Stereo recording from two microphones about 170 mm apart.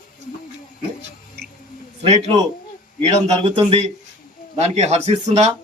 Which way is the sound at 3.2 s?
35° right (ahead or behind).